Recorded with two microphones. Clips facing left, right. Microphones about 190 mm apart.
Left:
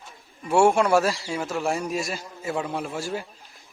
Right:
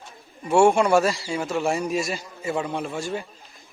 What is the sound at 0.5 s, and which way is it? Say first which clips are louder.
A man's voice: right 2 dB; centre (ahead or behind).